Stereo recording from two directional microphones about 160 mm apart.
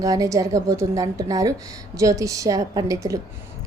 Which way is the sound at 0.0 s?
20° right (ahead or behind).